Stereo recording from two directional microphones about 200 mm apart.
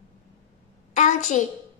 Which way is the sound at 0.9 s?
40° left (ahead or behind).